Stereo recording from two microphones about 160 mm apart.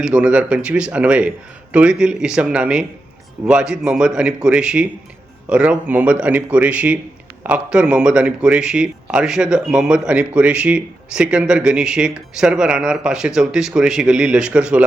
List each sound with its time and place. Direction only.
0.0 s speech: 5° right (ahead or behind)